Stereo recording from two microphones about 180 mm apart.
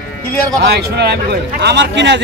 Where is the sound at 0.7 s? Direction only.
65° right (ahead or behind).